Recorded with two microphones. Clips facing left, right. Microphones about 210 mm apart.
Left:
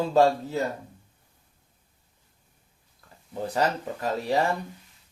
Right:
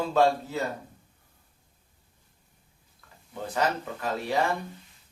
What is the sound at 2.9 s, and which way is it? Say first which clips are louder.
Speech: left 5 dB; 35° left (ahead or behind).